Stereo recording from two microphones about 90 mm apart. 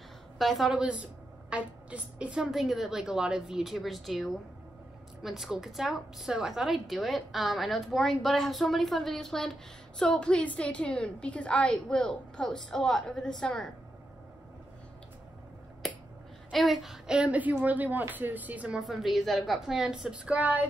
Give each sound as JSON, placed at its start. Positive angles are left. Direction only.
{"t": 0.4, "sound": "a woman's voice", "side_deg": 0}
{"t": 16.5, "sound": "speech", "side_deg": 0}
{"t": 18.8, "sound": "a woman's voice", "side_deg": 0}